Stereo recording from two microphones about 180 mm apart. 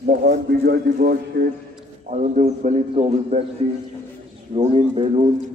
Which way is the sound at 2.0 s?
40° right (ahead or behind).